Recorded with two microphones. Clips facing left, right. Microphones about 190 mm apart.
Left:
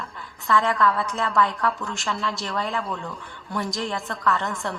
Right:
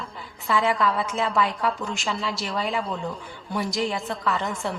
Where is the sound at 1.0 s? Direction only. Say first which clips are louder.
Left 1 dB; 5° right (ahead or behind); by 3.6 s 20° right (ahead or behind).